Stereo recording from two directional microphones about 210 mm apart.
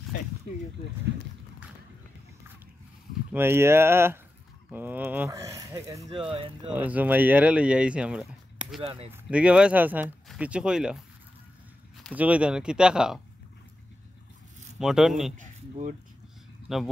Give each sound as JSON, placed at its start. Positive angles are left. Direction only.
{"t": 3.3, "sound": "speech", "side_deg": -10}
{"t": 6.3, "sound": "speech", "side_deg": -25}
{"t": 6.7, "sound": "speech", "side_deg": -5}
{"t": 8.8, "sound": "speech", "side_deg": -25}
{"t": 9.1, "sound": "speech", "side_deg": -5}
{"t": 12.0, "sound": "speech", "side_deg": -5}
{"t": 14.8, "sound": "speech", "side_deg": 0}
{"t": 15.3, "sound": "speech", "side_deg": -40}